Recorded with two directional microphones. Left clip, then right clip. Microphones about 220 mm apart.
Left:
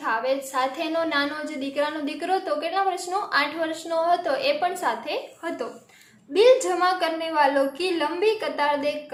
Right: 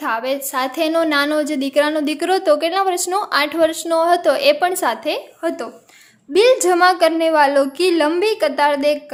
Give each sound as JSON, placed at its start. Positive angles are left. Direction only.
{"t": 0.0, "sound": "a woman's voice", "side_deg": -50}